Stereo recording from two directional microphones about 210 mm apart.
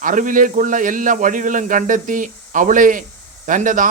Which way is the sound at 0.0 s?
40° right (ahead or behind).